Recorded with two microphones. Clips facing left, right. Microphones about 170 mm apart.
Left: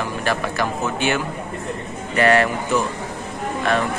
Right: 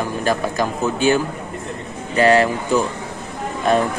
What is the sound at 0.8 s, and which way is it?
Speech, 35° right (ahead or behind).